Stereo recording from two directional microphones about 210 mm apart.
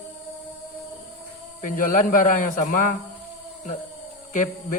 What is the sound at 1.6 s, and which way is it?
Speech, 40° left (ahead or behind).